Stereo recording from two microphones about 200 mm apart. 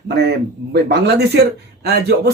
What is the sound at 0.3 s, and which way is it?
Speech, 55° right (ahead or behind).